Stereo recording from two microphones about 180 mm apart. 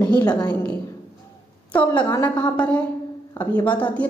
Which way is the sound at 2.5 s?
5° left (ahead or behind).